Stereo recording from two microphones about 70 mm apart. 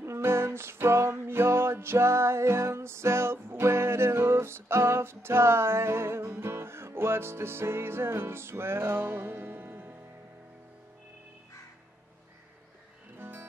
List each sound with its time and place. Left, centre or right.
0.0 s music: right
13.2 s music: right